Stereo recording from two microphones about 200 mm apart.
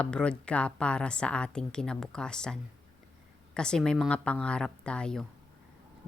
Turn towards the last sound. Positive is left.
turn(degrees=5)  # may be behind; listen again after turning